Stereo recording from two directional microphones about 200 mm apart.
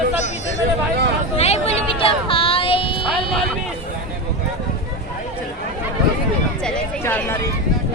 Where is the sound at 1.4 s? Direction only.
30° left (ahead or behind).